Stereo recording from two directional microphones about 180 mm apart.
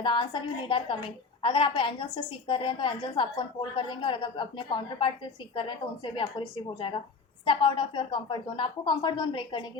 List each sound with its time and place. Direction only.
0.0 s a woman's voice: 25° left (ahead or behind)